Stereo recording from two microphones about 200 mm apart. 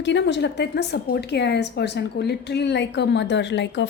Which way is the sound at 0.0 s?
60° left (ahead or behind).